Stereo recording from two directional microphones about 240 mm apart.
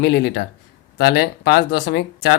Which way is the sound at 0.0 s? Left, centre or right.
Left.